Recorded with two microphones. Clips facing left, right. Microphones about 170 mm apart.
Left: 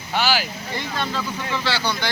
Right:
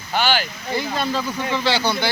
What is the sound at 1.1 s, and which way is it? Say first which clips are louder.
Speech: right 3 dB; 20° right (ahead or behind).